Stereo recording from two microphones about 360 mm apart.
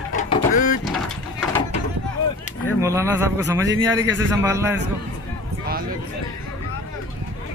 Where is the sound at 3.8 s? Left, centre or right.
Right.